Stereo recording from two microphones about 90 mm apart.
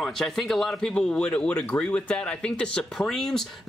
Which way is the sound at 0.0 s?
5° left (ahead or behind).